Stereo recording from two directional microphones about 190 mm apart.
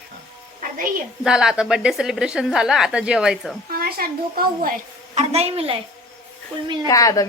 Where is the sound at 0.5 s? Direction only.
45° right (ahead or behind).